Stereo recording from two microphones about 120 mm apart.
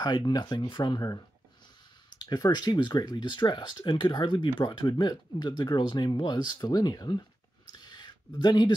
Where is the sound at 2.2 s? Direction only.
35° left (ahead or behind).